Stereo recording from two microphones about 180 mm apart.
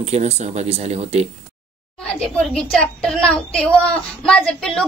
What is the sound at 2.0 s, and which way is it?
Speech, 5° left (ahead or behind).